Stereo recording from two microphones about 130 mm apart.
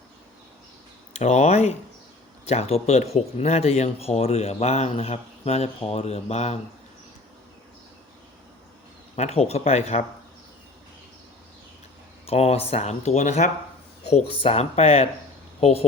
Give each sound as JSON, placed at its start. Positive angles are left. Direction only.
{"t": 1.1, "sound": "speech", "side_deg": 60}
{"t": 9.1, "sound": "speech", "side_deg": 55}
{"t": 12.2, "sound": "speech", "side_deg": 55}
{"t": 14.1, "sound": "speech", "side_deg": 50}